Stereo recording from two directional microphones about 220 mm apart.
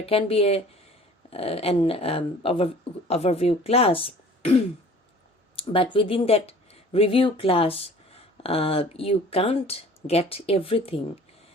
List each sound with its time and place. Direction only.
0.0 s speech: 25° left (ahead or behind)